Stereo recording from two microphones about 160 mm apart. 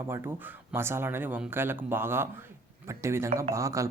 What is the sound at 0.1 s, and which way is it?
Speech, 15° right (ahead or behind).